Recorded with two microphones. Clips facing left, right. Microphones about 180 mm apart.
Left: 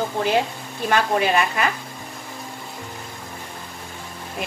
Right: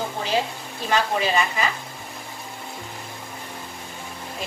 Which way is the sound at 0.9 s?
60° left (ahead or behind).